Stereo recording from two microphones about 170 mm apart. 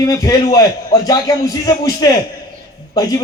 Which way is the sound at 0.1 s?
20° left (ahead or behind).